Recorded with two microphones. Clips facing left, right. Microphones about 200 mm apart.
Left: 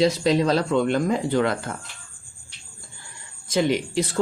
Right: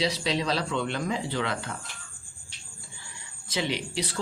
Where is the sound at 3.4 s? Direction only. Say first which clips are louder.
Left 8 dB; 45° left (ahead or behind).